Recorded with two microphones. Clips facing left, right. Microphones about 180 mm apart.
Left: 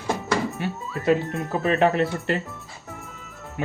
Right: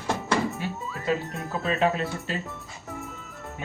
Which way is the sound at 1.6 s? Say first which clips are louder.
Left 5 dB; 65° left (ahead or behind).